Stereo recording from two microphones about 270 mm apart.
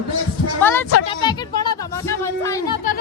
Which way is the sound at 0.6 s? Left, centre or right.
Centre.